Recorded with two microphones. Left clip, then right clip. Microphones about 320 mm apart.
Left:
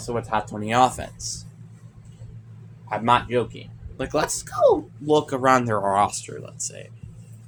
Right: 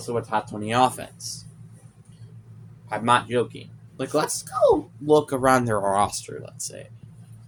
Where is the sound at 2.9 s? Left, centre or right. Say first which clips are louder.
Left 1 dB; right.